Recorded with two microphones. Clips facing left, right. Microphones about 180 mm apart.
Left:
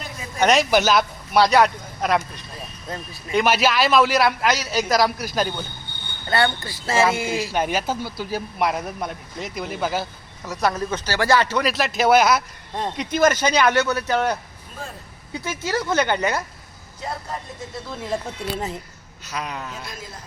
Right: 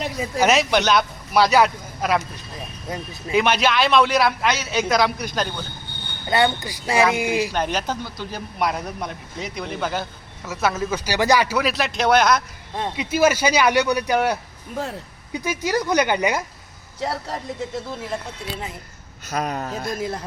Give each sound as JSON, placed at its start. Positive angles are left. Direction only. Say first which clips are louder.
{"t": 0.3, "sound": "a man's voice", "louder": "left 1 dB", "side_deg": -5}
{"t": 3.3, "sound": "a man's voice", "louder": "even", "side_deg": 5}
{"t": 6.2, "sound": "speech", "louder": "right 2 dB", "side_deg": -20}
{"t": 7.5, "sound": "a man's voice", "louder": "left 1 dB", "side_deg": 5}
{"t": 17.0, "sound": "a man's voice", "louder": "right 4 dB", "side_deg": -85}
{"t": 19.3, "sound": "speech", "louder": "right 5 dB", "side_deg": -45}
{"t": 20.0, "sound": "speech", "louder": "right 12 dB", "side_deg": -65}